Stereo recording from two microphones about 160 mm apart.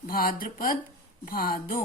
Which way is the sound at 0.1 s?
65° left (ahead or behind).